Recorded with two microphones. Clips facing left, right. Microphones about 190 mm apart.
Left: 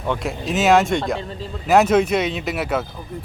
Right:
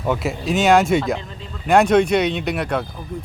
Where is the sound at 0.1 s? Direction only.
Centre (ahead or behind).